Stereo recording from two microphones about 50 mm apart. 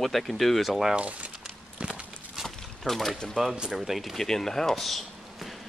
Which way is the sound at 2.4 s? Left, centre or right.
Centre.